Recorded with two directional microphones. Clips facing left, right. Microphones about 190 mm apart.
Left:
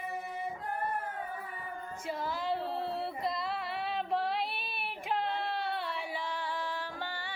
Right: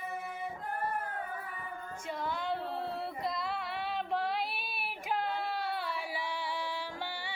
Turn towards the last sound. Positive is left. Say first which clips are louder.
# even
turn(degrees=-15)  # may be behind; listen again after turning